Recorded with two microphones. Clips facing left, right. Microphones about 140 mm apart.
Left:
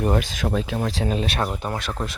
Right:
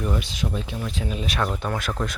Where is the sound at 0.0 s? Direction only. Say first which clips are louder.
Left 5 dB; 65° left (ahead or behind).